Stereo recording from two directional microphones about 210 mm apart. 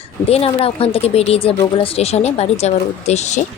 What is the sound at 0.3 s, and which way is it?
A woman's voice, 30° left (ahead or behind).